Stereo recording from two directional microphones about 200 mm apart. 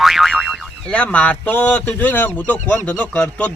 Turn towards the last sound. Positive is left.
turn(degrees=5)  # may be behind; listen again after turning